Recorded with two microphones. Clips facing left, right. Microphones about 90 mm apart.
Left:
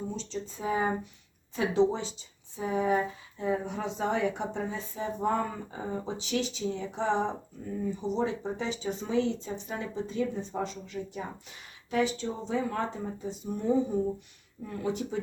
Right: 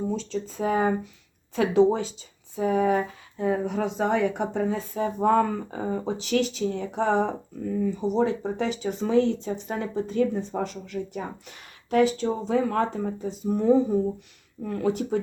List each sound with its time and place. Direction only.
0.1 s speech: 85° right; by 0.9 s 60° right (ahead or behind)
1.7 s speech: 50° right (ahead or behind)
2.6 s speech: 65° right (ahead or behind)
7.6 s speech: 90° right
8.1 s speech: 50° right (ahead or behind)